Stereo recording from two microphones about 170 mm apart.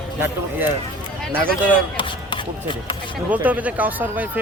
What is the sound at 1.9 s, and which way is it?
Speech, 30° left (ahead or behind).